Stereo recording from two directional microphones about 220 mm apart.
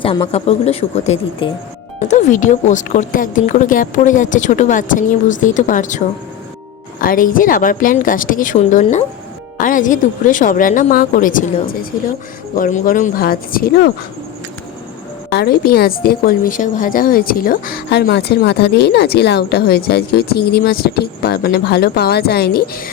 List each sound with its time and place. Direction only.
0.0 s a woman's voice: 25° left (ahead or behind)
7.0 s a woman's voice: 40° left (ahead or behind)
15.3 s a woman's voice: 45° left (ahead or behind)